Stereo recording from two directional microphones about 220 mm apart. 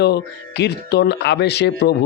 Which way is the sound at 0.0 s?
50° left (ahead or behind).